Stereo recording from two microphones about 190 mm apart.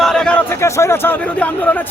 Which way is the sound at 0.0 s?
5° left (ahead or behind).